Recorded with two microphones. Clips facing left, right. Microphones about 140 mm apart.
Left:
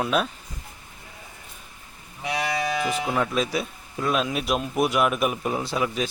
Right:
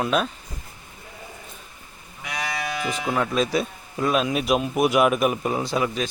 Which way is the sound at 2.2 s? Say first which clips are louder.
Left 4 dB; 30° left (ahead or behind).